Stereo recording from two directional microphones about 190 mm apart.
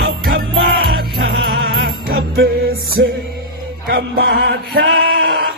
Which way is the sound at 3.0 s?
70° right (ahead or behind).